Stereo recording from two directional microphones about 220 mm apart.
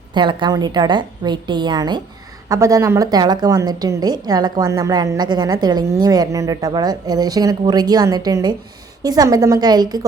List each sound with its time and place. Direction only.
0.1 s a woman's voice: 20° right (ahead or behind)